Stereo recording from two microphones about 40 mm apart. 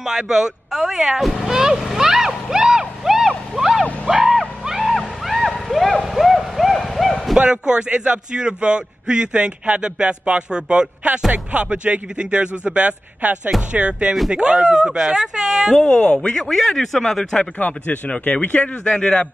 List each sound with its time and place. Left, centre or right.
0.0 s speech: centre
1.4 s vehicle: centre
6.0 s hoot: centre
7.3 s a man's voice: right
13.2 s a man's voice: right; by 15.7 s centre
16.0 s speech: left
16.3 s speech: centre
17.6 s speech: left
18.9 s speech: left